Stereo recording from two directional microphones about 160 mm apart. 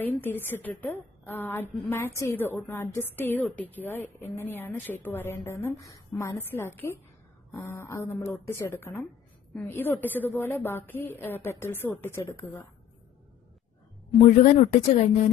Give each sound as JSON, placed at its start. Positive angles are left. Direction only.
{"t": 0.0, "sound": "a woman's voice", "side_deg": 10}
{"t": 14.2, "sound": "speech", "side_deg": 50}